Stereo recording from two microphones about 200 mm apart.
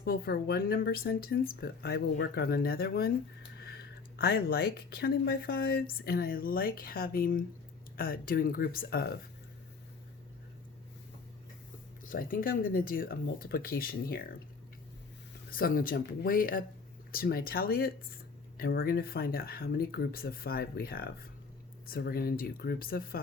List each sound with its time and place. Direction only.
0.0 s speech: 50° left (ahead or behind)
12.0 s speech: 45° left (ahead or behind)
15.4 s speech: 45° left (ahead or behind)